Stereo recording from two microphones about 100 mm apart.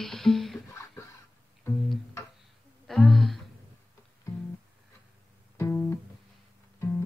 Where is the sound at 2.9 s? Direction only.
5° left (ahead or behind).